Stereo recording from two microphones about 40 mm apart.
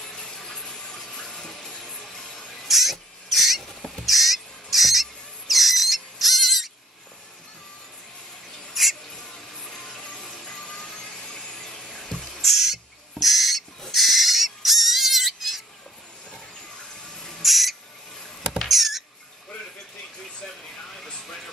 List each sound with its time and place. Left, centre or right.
0.2 s a sound: centre
1.9 s music: centre
2.7 s rodents: centre
3.9 s bird: centre
5.5 s cricket: centre
8.8 s owl: centre
9.7 s music: centre
10.6 s a sound: left; by 12.8 s centre
13.1 s owl: centre
17.1 s owl: centre
17.4 s owl: centre
18.7 s rodents: centre